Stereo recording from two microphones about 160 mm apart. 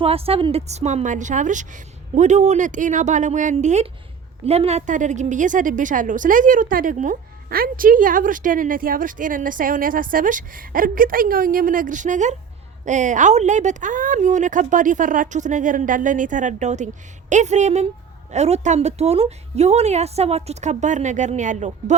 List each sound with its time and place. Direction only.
0.0 s a woman's voice: 35° right (ahead or behind)